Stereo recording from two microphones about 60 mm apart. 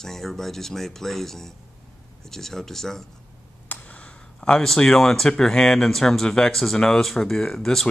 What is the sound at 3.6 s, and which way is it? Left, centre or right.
Clicking, left.